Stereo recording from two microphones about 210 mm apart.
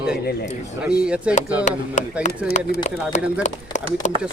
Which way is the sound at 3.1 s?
35° left (ahead or behind).